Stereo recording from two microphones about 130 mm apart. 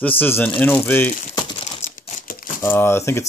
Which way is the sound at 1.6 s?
70° left (ahead or behind).